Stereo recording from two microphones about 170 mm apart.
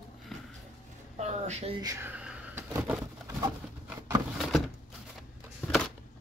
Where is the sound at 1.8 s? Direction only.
15° right (ahead or behind).